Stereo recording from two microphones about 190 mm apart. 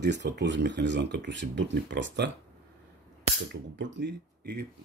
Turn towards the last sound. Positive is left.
turn(degrees=-60)  # may be behind; listen again after turning